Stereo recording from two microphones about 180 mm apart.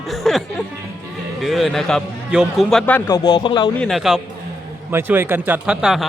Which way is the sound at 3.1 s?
20° left (ahead or behind).